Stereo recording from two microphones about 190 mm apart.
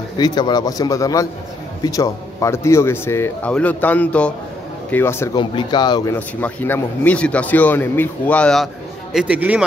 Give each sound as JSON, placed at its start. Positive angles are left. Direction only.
{"t": 0.2, "sound": "a man's voice", "side_deg": 20}
{"t": 5.4, "sound": "a man's voice", "side_deg": 25}
{"t": 6.1, "sound": "speech", "side_deg": 10}
{"t": 9.1, "sound": "a man's voice", "side_deg": -5}